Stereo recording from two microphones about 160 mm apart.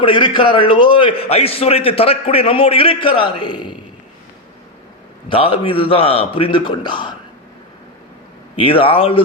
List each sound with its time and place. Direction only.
0.0 s a man's voice: 30° left (ahead or behind)
5.3 s a man's voice: 35° left (ahead or behind)
8.5 s a man's voice: 35° left (ahead or behind)